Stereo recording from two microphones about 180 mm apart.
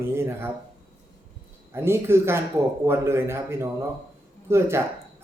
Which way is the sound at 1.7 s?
15° right (ahead or behind).